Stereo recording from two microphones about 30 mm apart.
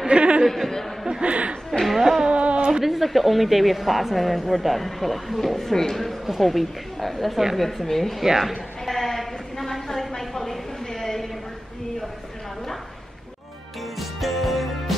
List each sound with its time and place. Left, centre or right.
0.1 s speech: right
0.5 s a man's voice: centre
1.2 s speech: right
1.7 s a woman's voice: centre
2.3 s a sound: right
2.8 s a woman's voice: centre
6.2 s a woman's voice: centre
8.2 s a woman's voice: centre
8.8 s a sound: centre
13.9 s music: centre